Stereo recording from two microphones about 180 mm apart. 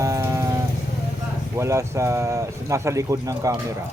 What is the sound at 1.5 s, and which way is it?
Speech, 15° right (ahead or behind).